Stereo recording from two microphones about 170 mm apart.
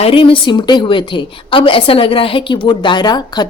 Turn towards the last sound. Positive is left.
turn(degrees=25)  # may be behind; listen again after turning